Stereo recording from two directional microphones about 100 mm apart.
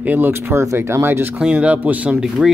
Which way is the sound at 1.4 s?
10° right (ahead or behind).